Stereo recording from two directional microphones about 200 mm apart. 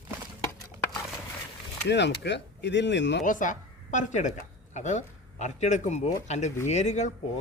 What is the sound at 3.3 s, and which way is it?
A woman's voice, 40° left (ahead or behind).